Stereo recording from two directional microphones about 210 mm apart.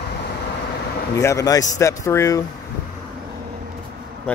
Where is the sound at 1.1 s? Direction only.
15° left (ahead or behind).